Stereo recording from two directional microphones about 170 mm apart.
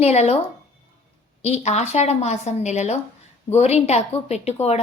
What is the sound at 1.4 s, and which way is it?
A woman's voice, 40° left (ahead or behind).